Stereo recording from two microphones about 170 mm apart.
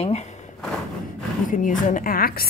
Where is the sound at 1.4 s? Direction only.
50° left (ahead or behind).